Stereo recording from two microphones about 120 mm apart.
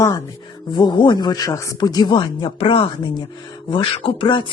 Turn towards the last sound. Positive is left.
turn(degrees=45)  # may be behind; listen again after turning